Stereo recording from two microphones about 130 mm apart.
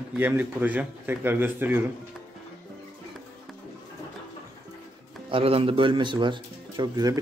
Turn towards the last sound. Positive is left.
turn(degrees=-30)  # may be behind; listen again after turning